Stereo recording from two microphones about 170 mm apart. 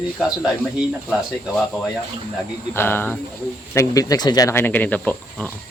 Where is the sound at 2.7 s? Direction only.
15° left (ahead or behind).